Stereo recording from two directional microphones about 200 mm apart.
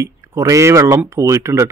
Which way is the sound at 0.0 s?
15° right (ahead or behind).